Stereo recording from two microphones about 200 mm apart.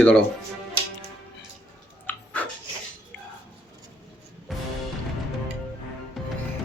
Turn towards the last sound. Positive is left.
turn(degrees=0)  # may be behind; listen again after turning